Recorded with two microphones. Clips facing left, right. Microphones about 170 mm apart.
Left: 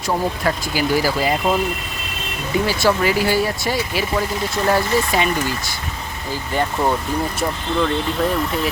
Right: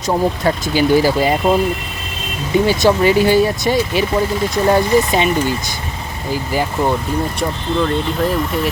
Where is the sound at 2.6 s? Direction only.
25° right (ahead or behind).